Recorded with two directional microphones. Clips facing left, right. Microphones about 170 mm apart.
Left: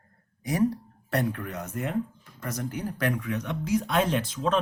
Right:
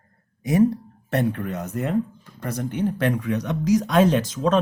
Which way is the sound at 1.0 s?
25° right (ahead or behind).